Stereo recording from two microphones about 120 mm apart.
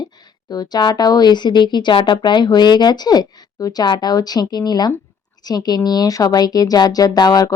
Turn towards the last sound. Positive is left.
turn(degrees=35)  # may be behind; listen again after turning